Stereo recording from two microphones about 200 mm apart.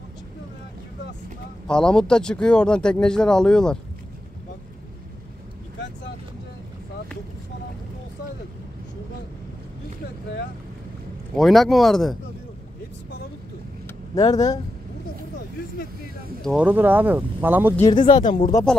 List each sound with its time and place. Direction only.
1.7 s speech: 5° left (ahead or behind)
11.3 s speech: centre (ahead or behind)
14.1 s speech: 20° left (ahead or behind)
16.4 s speech: 5° right (ahead or behind)
17.9 s speech: 25° left (ahead or behind)